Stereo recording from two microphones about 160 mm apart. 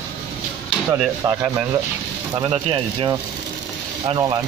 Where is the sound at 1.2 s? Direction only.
20° right (ahead or behind).